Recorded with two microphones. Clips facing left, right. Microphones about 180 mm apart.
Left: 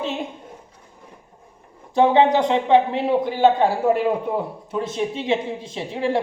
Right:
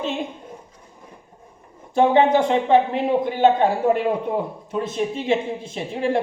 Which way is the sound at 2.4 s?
20° left (ahead or behind).